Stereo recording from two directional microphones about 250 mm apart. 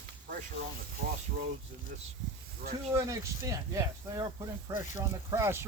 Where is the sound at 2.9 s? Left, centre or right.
Centre.